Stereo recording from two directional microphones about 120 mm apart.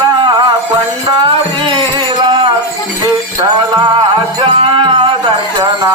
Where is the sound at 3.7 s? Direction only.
40° right (ahead or behind).